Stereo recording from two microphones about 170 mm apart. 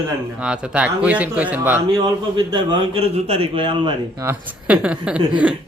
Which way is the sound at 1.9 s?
25° right (ahead or behind).